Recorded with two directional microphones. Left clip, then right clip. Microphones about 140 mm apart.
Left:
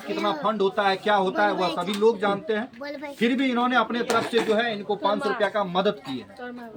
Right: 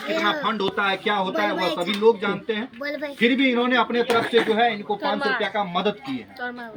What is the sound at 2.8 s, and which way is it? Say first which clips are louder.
Speech: right 5 dB; 30° right (ahead or behind).